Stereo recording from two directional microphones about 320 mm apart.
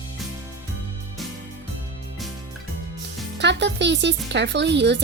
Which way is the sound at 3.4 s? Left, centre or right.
Right.